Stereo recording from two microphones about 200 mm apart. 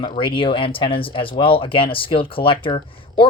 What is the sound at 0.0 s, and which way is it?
Speech, 25° left (ahead or behind).